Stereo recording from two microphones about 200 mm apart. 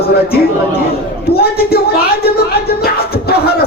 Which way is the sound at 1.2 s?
50° left (ahead or behind).